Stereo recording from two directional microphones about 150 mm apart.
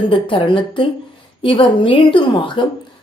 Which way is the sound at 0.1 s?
35° left (ahead or behind).